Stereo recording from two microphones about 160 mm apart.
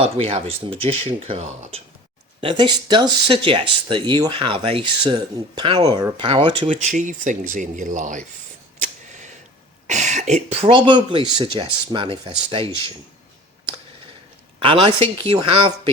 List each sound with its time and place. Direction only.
0.0 s speech: 35° right (ahead or behind)
2.4 s speech: 30° right (ahead or behind)
6.7 s speech: 50° right (ahead or behind)
8.8 s a sound: 50° right (ahead or behind)
9.8 s speech: 50° right (ahead or behind); by 12.9 s 30° right (ahead or behind)
14.6 s speech: 35° right (ahead or behind)